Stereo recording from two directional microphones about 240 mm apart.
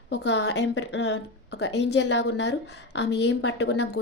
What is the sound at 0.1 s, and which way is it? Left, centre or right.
A woman's voice, left.